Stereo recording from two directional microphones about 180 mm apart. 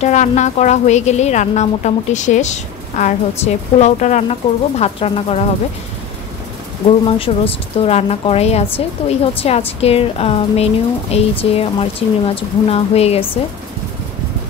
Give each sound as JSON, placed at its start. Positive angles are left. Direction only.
{"t": 0.0, "sound": "a woman's voice", "side_deg": 40}
{"t": 7.1, "sound": "a woman's voice", "side_deg": 30}